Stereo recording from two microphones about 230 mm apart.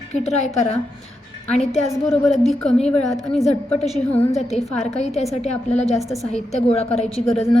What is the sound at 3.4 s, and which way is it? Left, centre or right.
Speech, left.